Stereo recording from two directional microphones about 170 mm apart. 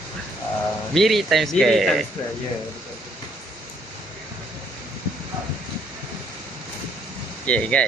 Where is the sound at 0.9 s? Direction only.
Centre (ahead or behind).